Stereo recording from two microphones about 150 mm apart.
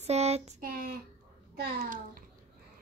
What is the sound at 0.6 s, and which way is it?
A child's voice, 75° right (ahead or behind).